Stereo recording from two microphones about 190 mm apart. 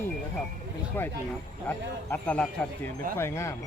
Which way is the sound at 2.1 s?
10° left (ahead or behind).